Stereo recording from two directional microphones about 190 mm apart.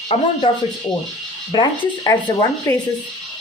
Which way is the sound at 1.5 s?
20° left (ahead or behind).